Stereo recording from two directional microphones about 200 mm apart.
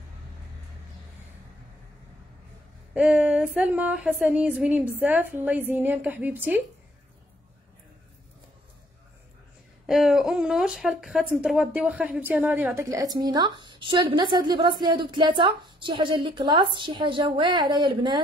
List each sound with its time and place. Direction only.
2.9 s speech: 5° right (ahead or behind)
9.8 s speech: centre (ahead or behind); by 18.2 s 20° right (ahead or behind)